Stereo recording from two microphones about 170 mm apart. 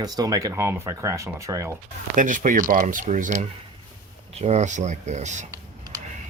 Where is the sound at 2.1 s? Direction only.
50° right (ahead or behind).